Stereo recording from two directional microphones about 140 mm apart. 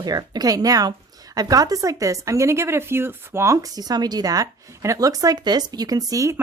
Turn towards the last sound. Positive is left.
turn(degrees=-25)  # may be behind; listen again after turning